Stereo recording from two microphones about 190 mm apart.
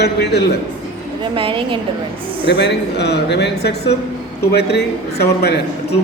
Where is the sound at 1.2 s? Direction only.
25° right (ahead or behind).